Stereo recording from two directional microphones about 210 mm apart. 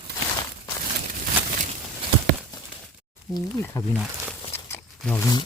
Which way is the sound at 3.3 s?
15° left (ahead or behind).